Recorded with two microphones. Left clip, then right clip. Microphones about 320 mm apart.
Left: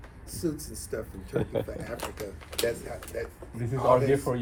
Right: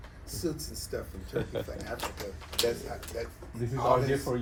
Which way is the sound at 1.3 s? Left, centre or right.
Centre.